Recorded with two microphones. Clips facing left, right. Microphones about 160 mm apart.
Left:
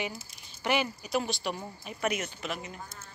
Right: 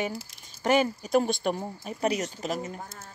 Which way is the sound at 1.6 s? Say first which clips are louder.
Right 5 dB; 35° right (ahead or behind).